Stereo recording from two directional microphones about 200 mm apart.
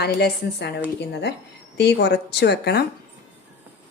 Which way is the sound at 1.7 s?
55° left (ahead or behind).